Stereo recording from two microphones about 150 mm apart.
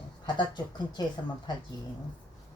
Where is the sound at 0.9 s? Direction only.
30° left (ahead or behind).